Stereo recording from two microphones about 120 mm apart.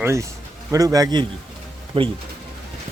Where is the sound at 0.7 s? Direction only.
30° right (ahead or behind).